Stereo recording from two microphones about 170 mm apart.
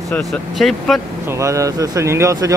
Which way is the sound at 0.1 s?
Centre (ahead or behind).